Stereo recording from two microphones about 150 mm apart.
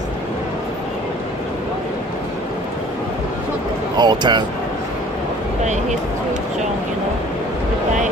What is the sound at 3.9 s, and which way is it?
Speech, 30° right (ahead or behind).